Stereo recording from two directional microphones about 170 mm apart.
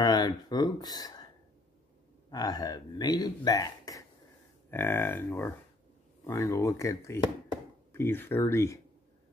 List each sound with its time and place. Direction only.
0.0 s speech: 25° left (ahead or behind)
2.3 s speech: 20° left (ahead or behind)